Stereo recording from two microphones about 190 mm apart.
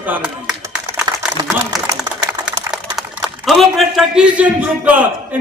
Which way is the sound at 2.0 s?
20° right (ahead or behind).